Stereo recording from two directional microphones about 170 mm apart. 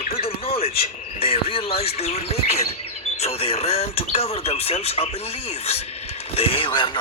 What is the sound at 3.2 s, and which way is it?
Radio, 35° left (ahead or behind).